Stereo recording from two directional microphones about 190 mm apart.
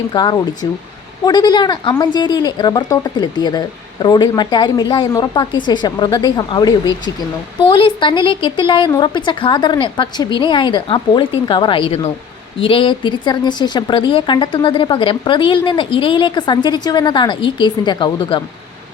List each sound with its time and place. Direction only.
0.1 s speech: 20° left (ahead or behind)